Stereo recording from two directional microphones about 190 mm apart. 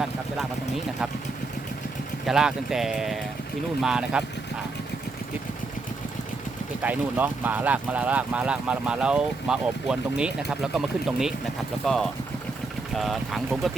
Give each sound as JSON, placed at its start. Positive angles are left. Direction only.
{"t": 2.2, "sound": "speech", "side_deg": 0}
{"t": 6.8, "sound": "speech", "side_deg": -10}